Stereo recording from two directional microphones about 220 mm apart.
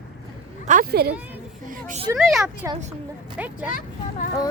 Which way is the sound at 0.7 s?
40° right (ahead or behind).